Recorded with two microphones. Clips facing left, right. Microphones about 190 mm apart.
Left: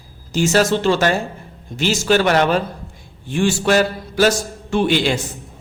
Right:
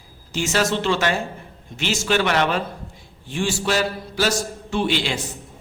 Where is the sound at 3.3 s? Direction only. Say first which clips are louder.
Left 6 dB; 55° left (ahead or behind).